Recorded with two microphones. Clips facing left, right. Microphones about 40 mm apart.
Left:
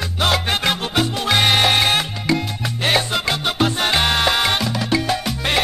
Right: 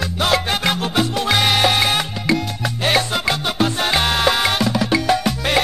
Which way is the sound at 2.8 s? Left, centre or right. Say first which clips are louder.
Even; centre.